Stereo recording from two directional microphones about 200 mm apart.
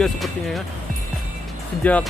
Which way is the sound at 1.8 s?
5° left (ahead or behind).